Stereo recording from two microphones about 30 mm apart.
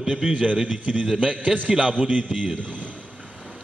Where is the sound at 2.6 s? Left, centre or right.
Right.